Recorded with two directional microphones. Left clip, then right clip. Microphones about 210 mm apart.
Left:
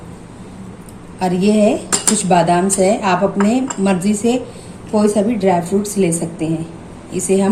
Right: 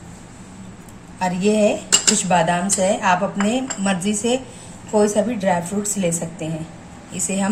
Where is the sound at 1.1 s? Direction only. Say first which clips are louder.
Left 3 dB; 40° right (ahead or behind).